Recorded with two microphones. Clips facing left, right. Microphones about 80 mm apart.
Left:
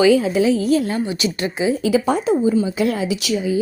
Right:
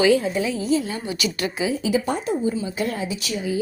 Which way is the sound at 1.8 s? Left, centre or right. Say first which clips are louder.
Left 6 dB; left.